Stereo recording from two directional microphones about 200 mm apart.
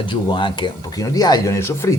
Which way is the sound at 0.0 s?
25° left (ahead or behind).